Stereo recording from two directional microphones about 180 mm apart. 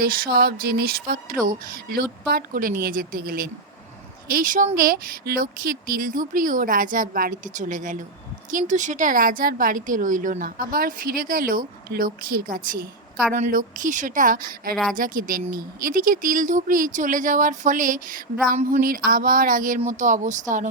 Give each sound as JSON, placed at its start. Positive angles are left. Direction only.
{"t": 0.0, "sound": "speech", "side_deg": -55}